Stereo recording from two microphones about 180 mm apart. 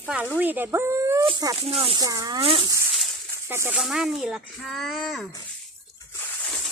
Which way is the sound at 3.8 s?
5° right (ahead or behind).